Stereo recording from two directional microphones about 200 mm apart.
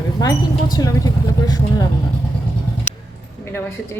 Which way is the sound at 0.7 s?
15° left (ahead or behind).